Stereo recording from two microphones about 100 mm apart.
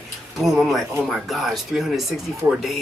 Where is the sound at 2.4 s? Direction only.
25° right (ahead or behind).